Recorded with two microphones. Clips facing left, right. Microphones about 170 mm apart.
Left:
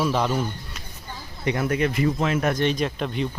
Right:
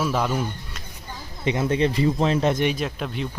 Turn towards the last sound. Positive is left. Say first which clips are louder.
# left 2 dB
turn(degrees=0)  # may be behind; listen again after turning